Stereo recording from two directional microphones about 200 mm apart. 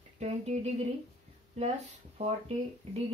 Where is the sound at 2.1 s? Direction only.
30° right (ahead or behind).